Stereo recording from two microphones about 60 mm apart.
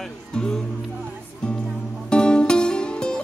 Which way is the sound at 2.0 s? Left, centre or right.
Centre.